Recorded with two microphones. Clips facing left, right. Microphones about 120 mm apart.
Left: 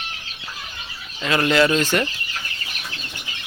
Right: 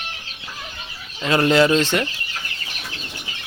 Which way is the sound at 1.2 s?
30° right (ahead or behind).